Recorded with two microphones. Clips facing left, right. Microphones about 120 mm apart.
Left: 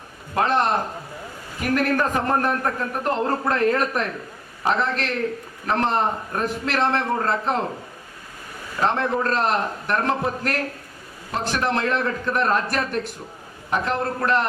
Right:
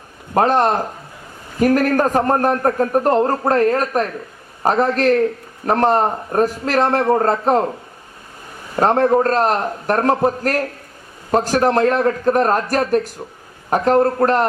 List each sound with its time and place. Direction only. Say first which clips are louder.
0.3 s a man's voice: right 5 dB; 40° right (ahead or behind)
8.7 s a man's voice: right 8 dB; 45° right (ahead or behind)